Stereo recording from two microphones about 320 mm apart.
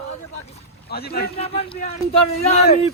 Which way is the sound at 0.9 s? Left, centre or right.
Left.